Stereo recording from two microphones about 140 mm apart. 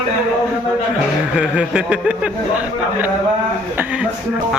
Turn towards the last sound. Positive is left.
turn(degrees=-10)  # may be behind; listen again after turning